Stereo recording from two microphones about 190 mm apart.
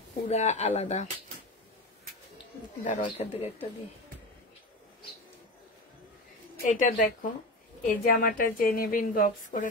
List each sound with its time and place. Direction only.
0.3 s speech: 35° left (ahead or behind)
2.8 s speech: 40° left (ahead or behind)
6.6 s a woman's voice: 40° left (ahead or behind)